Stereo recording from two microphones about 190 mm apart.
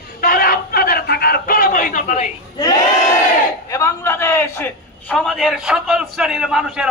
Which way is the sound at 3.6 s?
15° left (ahead or behind).